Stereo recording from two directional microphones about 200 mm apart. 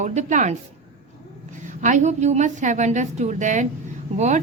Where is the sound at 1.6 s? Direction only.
40° right (ahead or behind).